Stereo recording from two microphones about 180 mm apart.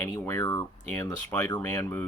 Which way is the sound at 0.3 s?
15° left (ahead or behind).